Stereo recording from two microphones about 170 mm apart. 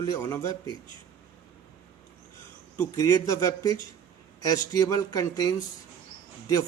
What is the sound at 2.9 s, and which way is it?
A man's voice, 20° left (ahead or behind).